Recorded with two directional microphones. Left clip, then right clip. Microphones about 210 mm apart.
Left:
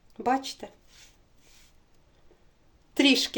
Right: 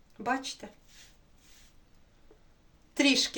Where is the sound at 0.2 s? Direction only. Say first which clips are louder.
Left 5 dB; 35° left (ahead or behind).